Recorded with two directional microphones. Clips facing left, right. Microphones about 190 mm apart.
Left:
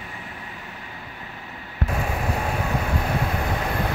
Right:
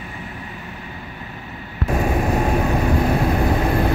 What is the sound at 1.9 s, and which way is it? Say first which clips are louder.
Vehicle: right 8 dB; 45° right (ahead or behind).